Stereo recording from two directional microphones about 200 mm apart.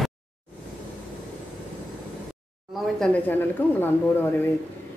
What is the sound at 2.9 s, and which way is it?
A woman's voice, 5° left (ahead or behind).